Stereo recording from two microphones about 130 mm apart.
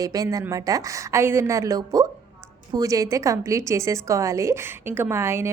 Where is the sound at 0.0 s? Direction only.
25° right (ahead or behind).